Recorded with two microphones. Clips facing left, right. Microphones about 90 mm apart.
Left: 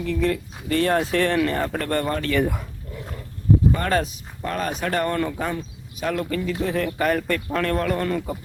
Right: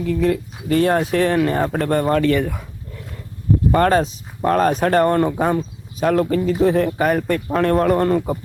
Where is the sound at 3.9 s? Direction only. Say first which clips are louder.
Right 5 dB; 30° right (ahead or behind).